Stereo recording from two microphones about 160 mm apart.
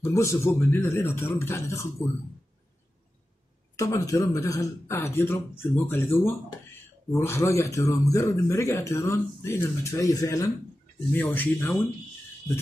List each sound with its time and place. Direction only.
0.1 s speech: 15° left (ahead or behind)
3.7 s speech: 20° left (ahead or behind)